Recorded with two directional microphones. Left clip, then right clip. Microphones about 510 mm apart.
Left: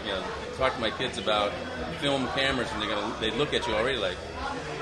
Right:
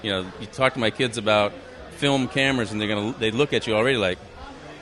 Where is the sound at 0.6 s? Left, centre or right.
Right.